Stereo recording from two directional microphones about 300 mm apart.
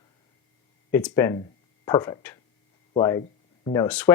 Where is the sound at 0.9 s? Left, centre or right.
Centre.